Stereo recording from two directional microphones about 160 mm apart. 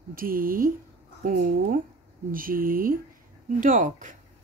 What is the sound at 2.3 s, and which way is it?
Speech, 60° right (ahead or behind).